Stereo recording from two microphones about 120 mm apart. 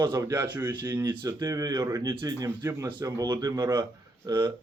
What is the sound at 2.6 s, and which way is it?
Speech, 20° right (ahead or behind).